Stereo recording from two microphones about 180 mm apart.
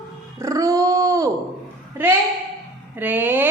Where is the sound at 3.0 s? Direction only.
10° right (ahead or behind).